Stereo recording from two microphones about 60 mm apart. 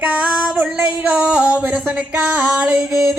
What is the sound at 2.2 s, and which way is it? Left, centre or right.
Female singing, right.